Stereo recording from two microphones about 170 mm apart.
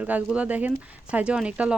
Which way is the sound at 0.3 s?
10° right (ahead or behind).